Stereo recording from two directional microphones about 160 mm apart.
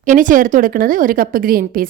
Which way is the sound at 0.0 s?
55° right (ahead or behind).